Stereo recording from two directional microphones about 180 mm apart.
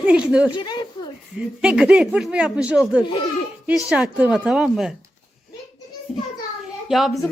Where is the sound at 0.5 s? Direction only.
25° left (ahead or behind).